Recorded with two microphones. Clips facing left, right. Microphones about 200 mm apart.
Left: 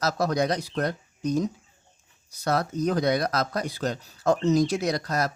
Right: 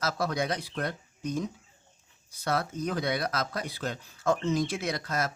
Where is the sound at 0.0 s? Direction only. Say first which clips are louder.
Left 5 dB; 40° left (ahead or behind).